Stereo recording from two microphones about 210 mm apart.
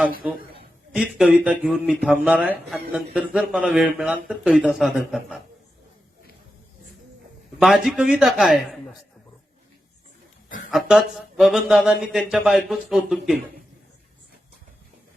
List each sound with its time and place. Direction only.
0.2 s a man's voice: 5° right (ahead or behind)
7.9 s speech: 5° right (ahead or behind)
10.7 s speech: centre (ahead or behind)